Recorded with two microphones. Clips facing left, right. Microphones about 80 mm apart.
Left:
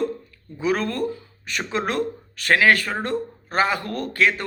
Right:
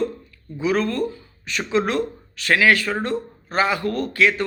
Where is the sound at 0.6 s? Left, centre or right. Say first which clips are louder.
Right 2 dB; left.